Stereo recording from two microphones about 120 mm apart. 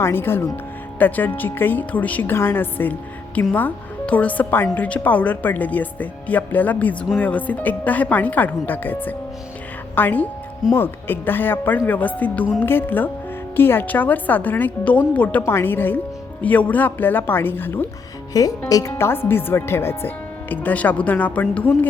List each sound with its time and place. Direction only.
0.0 s speech: 20° left (ahead or behind)
18.3 s speech: 30° left (ahead or behind); by 21.8 s 10° left (ahead or behind)